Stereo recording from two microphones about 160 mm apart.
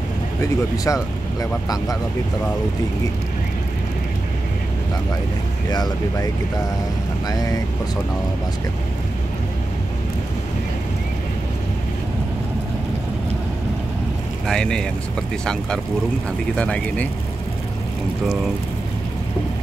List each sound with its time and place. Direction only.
0.4 s speech: 20° left (ahead or behind)
5.7 s speech: 25° left (ahead or behind)
14.5 s speech: 5° left (ahead or behind)
16.5 s speech: 5° left (ahead or behind)